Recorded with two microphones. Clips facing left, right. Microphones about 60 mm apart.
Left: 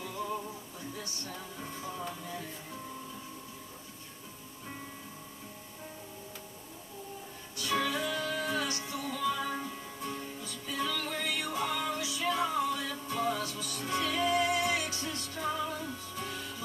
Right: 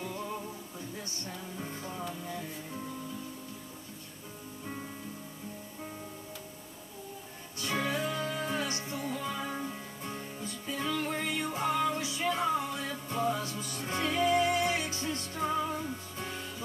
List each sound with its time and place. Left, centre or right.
1.6 s music: centre
7.5 s music: right